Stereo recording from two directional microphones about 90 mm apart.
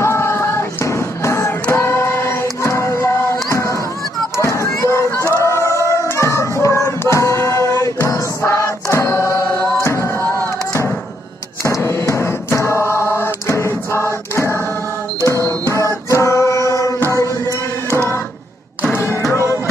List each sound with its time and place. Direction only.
0.0 s music: 30° left (ahead or behind)
1.7 s choir: 25° left (ahead or behind)
2.6 s music: 30° left (ahead or behind)
3.4 s a sound: 35° left (ahead or behind)
5.1 s music: 30° right (ahead or behind)
5.4 s choir: 30° left (ahead or behind)
5.9 s music: 30° left (ahead or behind)
11.6 s chant: 30° left (ahead or behind)
15.6 s music: 30° left (ahead or behind)